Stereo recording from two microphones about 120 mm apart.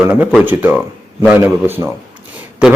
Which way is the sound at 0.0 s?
10° right (ahead or behind).